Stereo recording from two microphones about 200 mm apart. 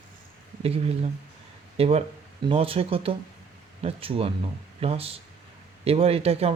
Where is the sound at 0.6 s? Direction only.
30° right (ahead or behind).